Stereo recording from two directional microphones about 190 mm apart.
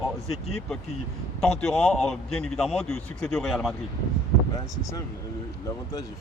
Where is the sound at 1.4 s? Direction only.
5° left (ahead or behind).